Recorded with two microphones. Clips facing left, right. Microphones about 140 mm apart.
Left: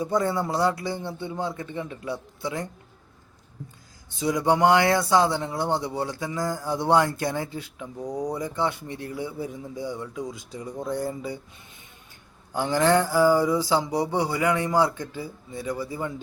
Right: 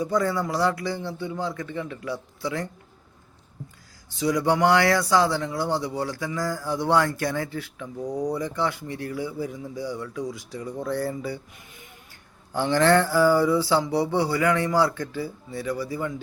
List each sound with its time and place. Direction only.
0.0 s speech: 25° left (ahead or behind)
4.1 s speech: 25° left (ahead or behind)
12.5 s a sound: 15° left (ahead or behind)